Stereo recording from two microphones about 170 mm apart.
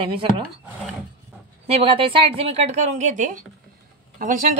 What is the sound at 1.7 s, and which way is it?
A woman's voice, 35° right (ahead or behind).